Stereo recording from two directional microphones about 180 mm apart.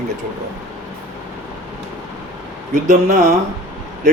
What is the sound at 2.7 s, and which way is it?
Speech, 45° right (ahead or behind).